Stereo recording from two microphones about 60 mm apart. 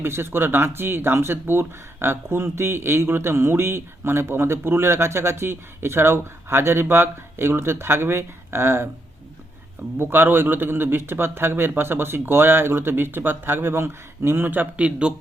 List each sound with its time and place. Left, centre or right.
0.0 s speech: right
10.0 s speech: right
14.8 s speech: centre